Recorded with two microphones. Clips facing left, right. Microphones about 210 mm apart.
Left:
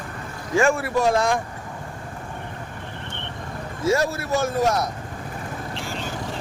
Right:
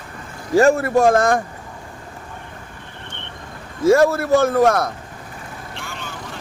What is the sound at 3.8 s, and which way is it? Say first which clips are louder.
Speech: right 8 dB; 55° right (ahead or behind).